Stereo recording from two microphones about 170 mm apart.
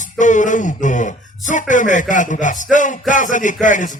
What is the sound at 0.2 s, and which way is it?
A man's voice, 45° left (ahead or behind).